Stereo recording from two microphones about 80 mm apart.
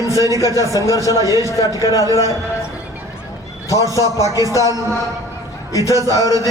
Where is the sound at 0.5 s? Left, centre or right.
Left.